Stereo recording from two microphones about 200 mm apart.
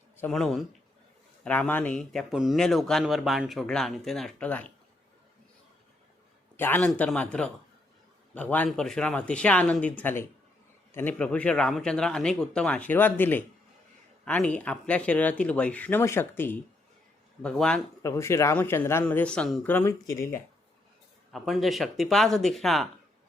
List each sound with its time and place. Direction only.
0.2 s speech: centre (ahead or behind)
6.6 s speech: 10° left (ahead or behind)
21.3 s speech: centre (ahead or behind)